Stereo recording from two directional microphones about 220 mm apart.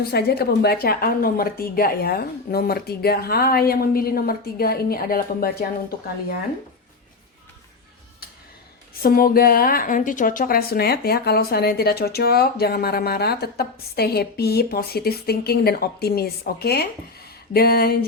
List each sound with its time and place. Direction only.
0.0 s a woman's voice: 45° left (ahead or behind)
9.0 s a woman's voice: 40° left (ahead or behind)
17.2 s a sound: 45° left (ahead or behind)